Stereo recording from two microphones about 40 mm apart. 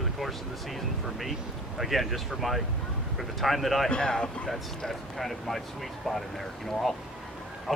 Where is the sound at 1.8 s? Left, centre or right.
Centre.